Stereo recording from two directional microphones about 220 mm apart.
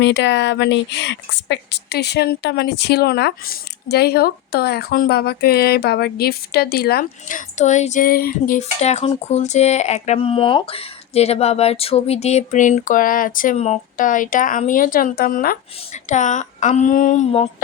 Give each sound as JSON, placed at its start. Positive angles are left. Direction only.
{"t": 0.0, "sound": "speech", "side_deg": 55}